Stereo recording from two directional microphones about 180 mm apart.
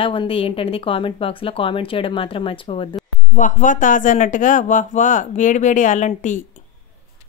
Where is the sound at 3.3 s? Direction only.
45° left (ahead or behind).